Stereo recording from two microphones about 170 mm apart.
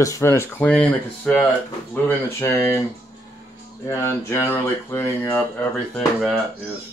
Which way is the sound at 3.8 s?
15° left (ahead or behind).